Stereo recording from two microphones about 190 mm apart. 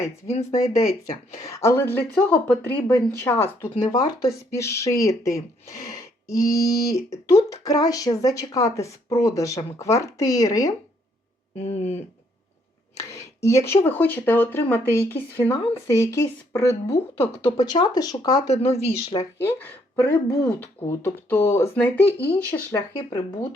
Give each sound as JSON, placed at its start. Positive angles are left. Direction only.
{"t": 0.7, "sound": "a woman's voice", "side_deg": 15}
{"t": 11.6, "sound": "speech", "side_deg": 35}
{"t": 13.0, "sound": "a woman's voice", "side_deg": 15}
{"t": 16.9, "sound": "speech", "side_deg": 30}
{"t": 18.4, "sound": "speech", "side_deg": 35}
{"t": 19.4, "sound": "a woman's voice", "side_deg": 10}